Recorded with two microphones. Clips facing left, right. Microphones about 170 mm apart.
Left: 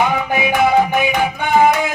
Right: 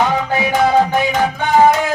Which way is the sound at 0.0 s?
15° left (ahead or behind).